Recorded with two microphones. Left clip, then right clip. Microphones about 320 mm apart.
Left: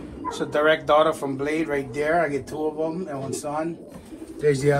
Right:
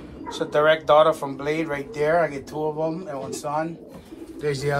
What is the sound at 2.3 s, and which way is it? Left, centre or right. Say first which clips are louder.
Speech: left 4 dB; right.